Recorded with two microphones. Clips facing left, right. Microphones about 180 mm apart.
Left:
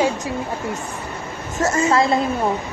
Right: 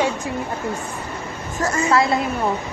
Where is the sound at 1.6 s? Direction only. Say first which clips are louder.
Left 1 dB; 25° left (ahead or behind).